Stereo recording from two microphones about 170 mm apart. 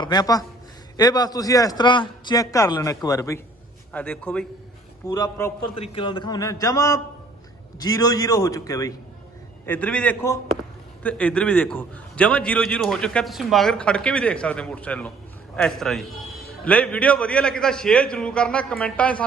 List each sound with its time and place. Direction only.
0.0 s a man's voice: 25° left (ahead or behind); by 4.4 s 10° left (ahead or behind)
5.0 s a man's voice: 20° left (ahead or behind)
5.7 s a man's voice: 35° left (ahead or behind)
9.6 s a man's voice: 10° left (ahead or behind)